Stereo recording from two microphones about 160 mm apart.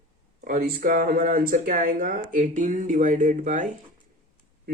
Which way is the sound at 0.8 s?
60° right (ahead or behind).